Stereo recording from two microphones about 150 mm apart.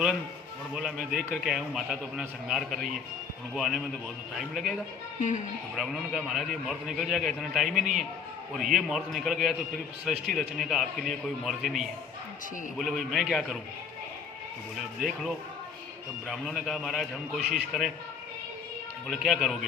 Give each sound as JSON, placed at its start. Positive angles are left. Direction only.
{"t": 0.7, "sound": "a man's voice", "side_deg": -5}
{"t": 5.7, "sound": "a man's voice", "side_deg": 0}
{"t": 15.0, "sound": "a man's voice", "side_deg": 0}
{"t": 19.0, "sound": "a man's voice", "side_deg": 0}